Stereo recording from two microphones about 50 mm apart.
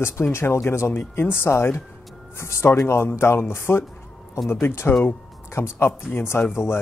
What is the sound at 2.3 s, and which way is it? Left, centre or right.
Speech, left.